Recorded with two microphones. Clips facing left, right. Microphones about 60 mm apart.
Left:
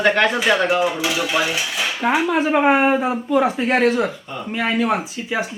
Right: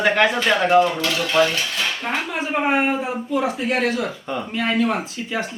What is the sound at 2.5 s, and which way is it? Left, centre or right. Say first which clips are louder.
Speech: left 3 dB; left.